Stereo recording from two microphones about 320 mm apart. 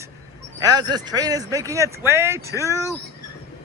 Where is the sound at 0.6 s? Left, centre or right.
Centre.